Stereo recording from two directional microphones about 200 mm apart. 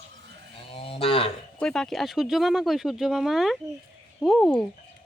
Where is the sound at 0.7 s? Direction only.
30° left (ahead or behind).